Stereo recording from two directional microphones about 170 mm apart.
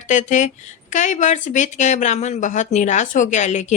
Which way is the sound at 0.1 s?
45° left (ahead or behind).